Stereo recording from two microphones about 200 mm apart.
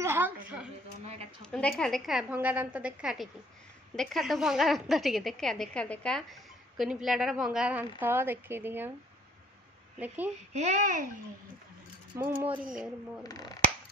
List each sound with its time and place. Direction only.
0.0 s a sound: 10° right (ahead or behind)
1.4 s a woman's voice: 5° left (ahead or behind)
9.9 s a woman's voice: 10° right (ahead or behind)
10.5 s a child's voice: 35° right (ahead or behind)
12.2 s a woman's voice: 10° right (ahead or behind)
13.2 s speech: 20° left (ahead or behind)